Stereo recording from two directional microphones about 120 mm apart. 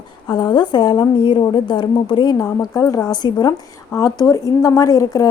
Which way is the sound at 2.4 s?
30° left (ahead or behind).